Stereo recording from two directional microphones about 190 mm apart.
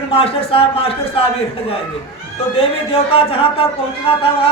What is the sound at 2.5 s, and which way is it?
A man's voice, 30° left (ahead or behind).